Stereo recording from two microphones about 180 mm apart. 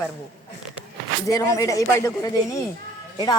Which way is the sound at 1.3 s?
20° left (ahead or behind).